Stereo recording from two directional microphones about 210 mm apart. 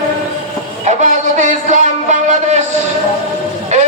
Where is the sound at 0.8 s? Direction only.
35° right (ahead or behind).